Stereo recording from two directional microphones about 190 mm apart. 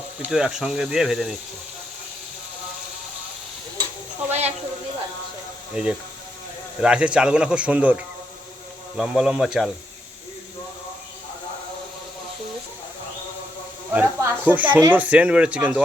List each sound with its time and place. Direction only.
0.2 s speech: centre (ahead or behind)
4.3 s a sound: 35° right (ahead or behind)
5.7 s speech: 5° right (ahead or behind)
13.9 s speech: 10° right (ahead or behind)